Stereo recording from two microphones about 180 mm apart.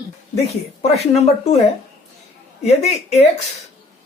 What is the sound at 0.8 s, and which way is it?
Speech, 35° left (ahead or behind).